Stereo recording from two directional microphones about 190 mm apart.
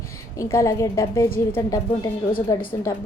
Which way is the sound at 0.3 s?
15° left (ahead or behind).